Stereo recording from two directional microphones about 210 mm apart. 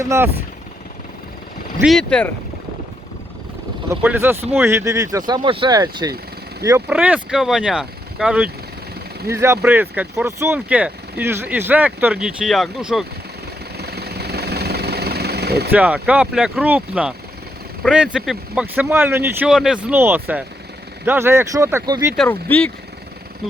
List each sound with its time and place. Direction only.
0.0 s speech: 15° right (ahead or behind)
1.8 s speech: centre (ahead or behind)
3.8 s speech: 10° right (ahead or behind)
13.7 s jackhammer: 50° right (ahead or behind)
15.7 s speech: 5° right (ahead or behind)
22.1 s speech: 5° left (ahead or behind)